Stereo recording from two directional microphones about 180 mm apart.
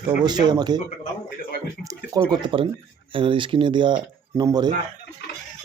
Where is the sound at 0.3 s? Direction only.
25° right (ahead or behind).